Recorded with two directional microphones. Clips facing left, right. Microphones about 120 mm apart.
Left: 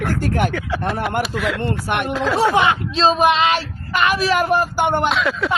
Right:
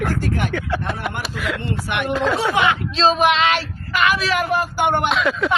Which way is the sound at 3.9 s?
35° left (ahead or behind).